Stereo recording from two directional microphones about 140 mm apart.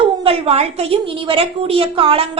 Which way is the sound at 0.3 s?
45° right (ahead or behind).